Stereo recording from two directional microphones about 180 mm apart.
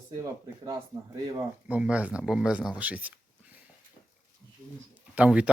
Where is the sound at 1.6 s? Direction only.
5° right (ahead or behind).